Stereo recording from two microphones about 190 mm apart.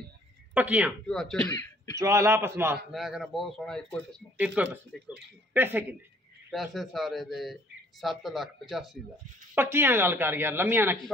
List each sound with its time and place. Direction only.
0.6 s speech: 10° right (ahead or behind)
1.0 s speech: 5° left (ahead or behind)
2.0 s speech: 15° right (ahead or behind)
2.9 s speech: centre (ahead or behind)
4.6 s speech: 5° right (ahead or behind)
6.5 s speech: centre (ahead or behind)
9.6 s speech: 10° right (ahead or behind)